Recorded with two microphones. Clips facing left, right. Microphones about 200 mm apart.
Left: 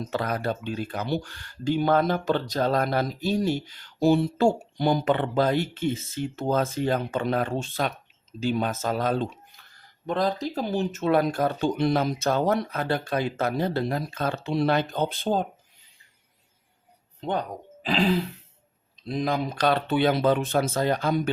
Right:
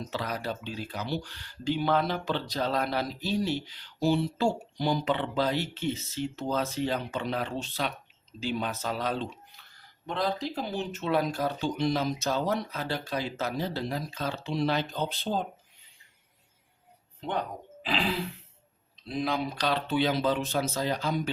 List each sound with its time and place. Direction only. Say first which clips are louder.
0.1 s speech: left 6 dB; 50° left (ahead or behind)
17.8 s a sound: left 7 dB; 40° left (ahead or behind)
19.0 s speech: left 3 dB; 45° left (ahead or behind)